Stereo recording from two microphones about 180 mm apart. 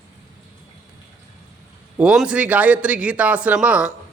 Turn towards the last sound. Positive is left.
turn(degrees=-5)  # may be behind; listen again after turning